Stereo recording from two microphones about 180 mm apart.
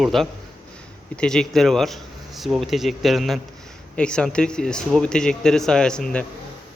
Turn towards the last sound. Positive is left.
turn(degrees=5)  # may be behind; listen again after turning